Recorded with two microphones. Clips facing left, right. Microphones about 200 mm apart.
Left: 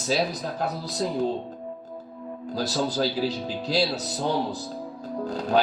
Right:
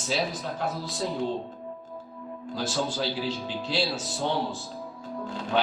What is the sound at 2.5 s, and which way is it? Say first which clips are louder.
Speech: left 4 dB; 40° left (ahead or behind).